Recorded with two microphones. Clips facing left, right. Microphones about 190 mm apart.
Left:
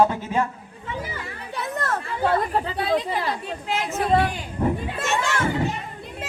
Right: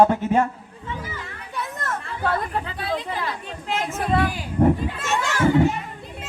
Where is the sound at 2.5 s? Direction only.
30° left (ahead or behind).